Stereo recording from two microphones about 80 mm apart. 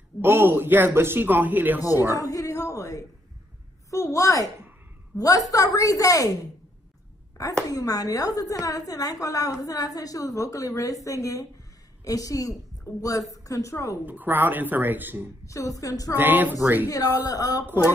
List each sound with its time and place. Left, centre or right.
0.2 s speech: right
2.2 s a woman's voice: left
7.7 s a woman's voice: left
14.0 s speech: right
15.4 s a woman's voice: left
16.2 s speech: right
16.9 s a woman's voice: left